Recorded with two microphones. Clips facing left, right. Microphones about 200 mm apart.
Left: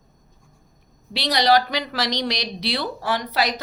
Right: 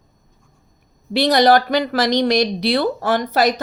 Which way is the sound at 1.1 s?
50° right (ahead or behind).